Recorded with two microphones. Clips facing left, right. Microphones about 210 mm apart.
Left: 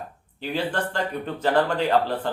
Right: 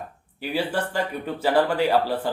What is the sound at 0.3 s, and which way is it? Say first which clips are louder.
Speech: right 1 dB; 10° right (ahead or behind).